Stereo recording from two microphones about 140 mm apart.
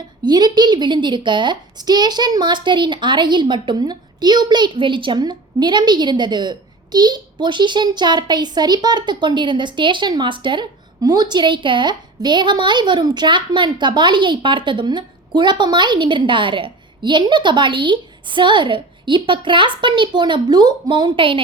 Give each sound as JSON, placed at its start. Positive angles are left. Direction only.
{"t": 0.2, "sound": "a woman's voice", "side_deg": -30}